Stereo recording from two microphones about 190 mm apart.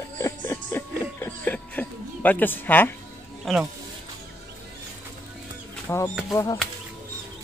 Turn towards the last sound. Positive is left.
turn(degrees=15)  # may be behind; listen again after turning